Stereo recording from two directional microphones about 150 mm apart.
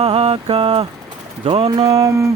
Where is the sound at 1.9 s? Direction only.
25° right (ahead or behind).